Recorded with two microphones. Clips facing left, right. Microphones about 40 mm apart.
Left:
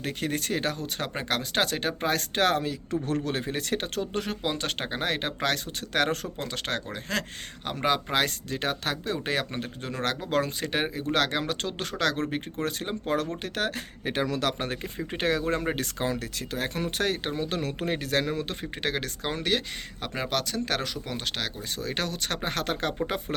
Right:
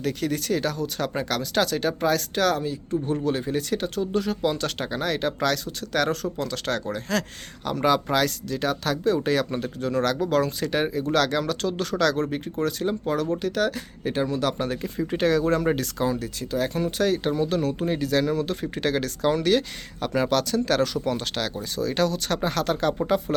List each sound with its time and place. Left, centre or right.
0.0 s speech: left
2.6 s speech: left
3.2 s speech: left
4.4 s speech: left
14.6 s speech: left
16.0 s speech: left
18.6 s speech: left
21.8 s speech: left